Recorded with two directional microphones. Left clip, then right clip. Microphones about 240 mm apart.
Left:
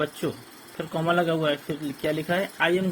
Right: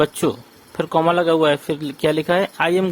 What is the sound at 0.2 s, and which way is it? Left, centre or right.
Speech, right.